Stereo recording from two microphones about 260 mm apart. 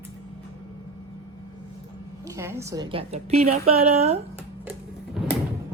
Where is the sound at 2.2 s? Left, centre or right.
Centre.